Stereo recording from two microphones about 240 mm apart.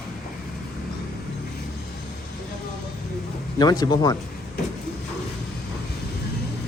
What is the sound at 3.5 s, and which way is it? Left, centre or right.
Speech, centre.